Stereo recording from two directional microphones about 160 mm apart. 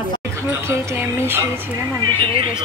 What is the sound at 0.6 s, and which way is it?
Speech, 15° right (ahead or behind).